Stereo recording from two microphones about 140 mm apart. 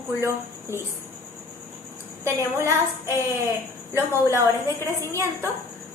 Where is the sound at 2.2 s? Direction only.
20° right (ahead or behind).